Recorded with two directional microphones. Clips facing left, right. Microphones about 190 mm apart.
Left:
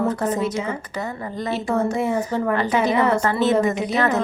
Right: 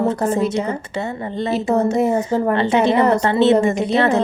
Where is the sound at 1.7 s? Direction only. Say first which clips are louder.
Right 5 dB; 20° right (ahead or behind).